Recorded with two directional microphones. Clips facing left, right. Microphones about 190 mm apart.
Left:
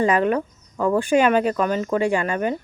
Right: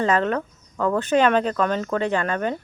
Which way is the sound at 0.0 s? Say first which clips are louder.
Left 2 dB; 10° left (ahead or behind).